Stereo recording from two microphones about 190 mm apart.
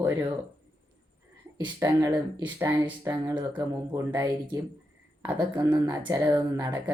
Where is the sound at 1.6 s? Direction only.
20° right (ahead or behind).